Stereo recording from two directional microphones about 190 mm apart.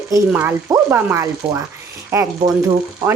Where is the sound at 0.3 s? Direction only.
10° right (ahead or behind).